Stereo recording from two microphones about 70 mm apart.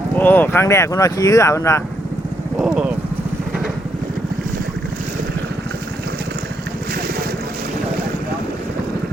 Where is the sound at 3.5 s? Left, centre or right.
Centre.